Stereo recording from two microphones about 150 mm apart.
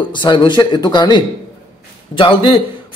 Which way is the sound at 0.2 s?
30° left (ahead or behind).